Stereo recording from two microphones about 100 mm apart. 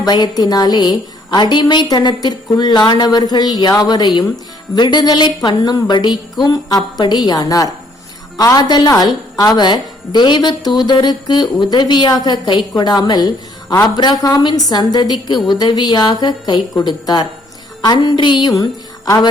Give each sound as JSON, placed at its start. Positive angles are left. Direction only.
{"t": 0.0, "sound": "a woman's voice", "side_deg": 45}
{"t": 18.5, "sound": "a woman's voice", "side_deg": 35}